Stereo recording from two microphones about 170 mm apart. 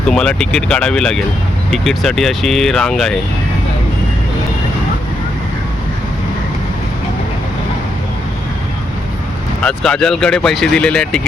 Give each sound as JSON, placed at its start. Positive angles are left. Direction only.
{"t": 0.1, "sound": "speech", "side_deg": 5}
{"t": 9.6, "sound": "speech", "side_deg": 5}